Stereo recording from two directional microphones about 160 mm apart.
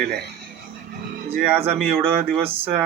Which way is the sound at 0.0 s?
90° right.